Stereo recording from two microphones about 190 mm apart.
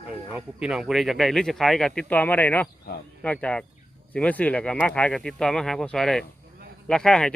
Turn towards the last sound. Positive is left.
turn(degrees=5)  # may be behind; listen again after turning